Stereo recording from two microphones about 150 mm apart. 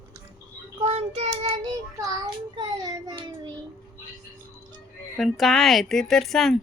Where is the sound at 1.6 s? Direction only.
25° right (ahead or behind).